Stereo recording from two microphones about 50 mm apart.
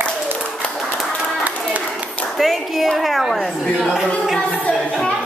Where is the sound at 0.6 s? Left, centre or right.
Left.